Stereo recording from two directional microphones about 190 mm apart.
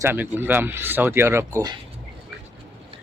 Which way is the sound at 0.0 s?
10° right (ahead or behind).